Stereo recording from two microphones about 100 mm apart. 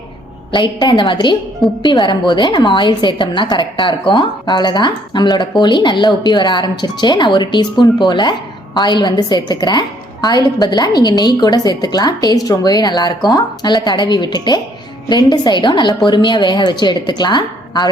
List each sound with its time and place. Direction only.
0.5 s a woman's voice: 50° left (ahead or behind)